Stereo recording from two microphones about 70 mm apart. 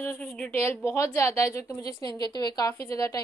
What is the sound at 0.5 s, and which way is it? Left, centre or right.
Speech, left.